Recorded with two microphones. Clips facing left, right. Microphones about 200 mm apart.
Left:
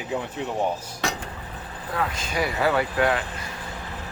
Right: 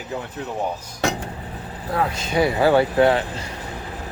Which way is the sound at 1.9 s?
30° right (ahead or behind).